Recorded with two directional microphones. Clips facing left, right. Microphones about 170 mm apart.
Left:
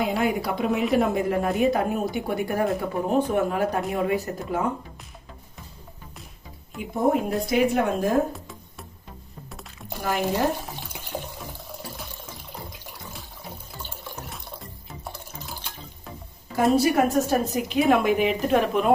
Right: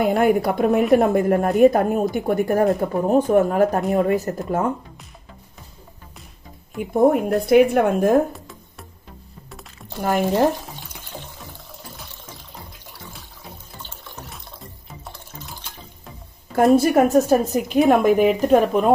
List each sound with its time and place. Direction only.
0.0 s a woman's voice: 55° right (ahead or behind)
7.1 s a woman's voice: 55° right (ahead or behind)
8.3 s music: centre (ahead or behind)
10.0 s a woman's voice: 50° right (ahead or behind)
16.7 s a woman's voice: 50° right (ahead or behind)